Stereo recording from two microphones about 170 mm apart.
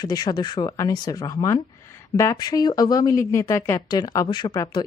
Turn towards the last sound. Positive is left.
turn(degrees=25)  # may be behind; listen again after turning